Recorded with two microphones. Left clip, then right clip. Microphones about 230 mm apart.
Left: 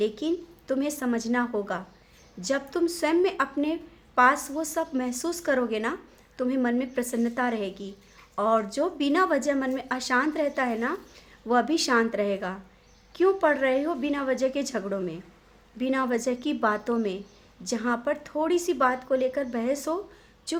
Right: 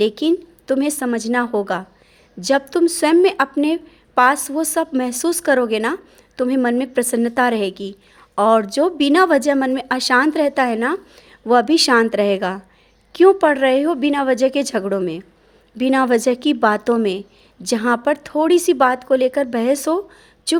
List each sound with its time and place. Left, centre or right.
0.0 s a woman's voice: right